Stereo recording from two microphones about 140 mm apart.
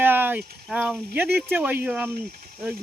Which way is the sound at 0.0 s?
15° right (ahead or behind).